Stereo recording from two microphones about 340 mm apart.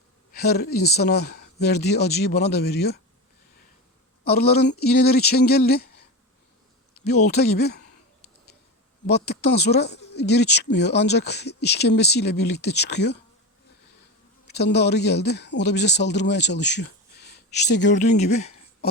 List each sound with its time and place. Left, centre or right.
0.3 s speech: left
4.2 s speech: left
7.3 s speech: left
9.0 s speech: left
14.4 s speech: left
18.2 s speech: centre